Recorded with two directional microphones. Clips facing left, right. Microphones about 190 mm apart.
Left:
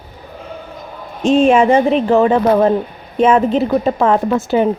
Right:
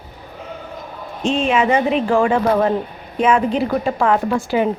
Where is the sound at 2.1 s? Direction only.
25° left (ahead or behind).